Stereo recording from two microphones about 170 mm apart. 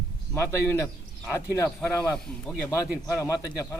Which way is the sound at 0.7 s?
15° left (ahead or behind).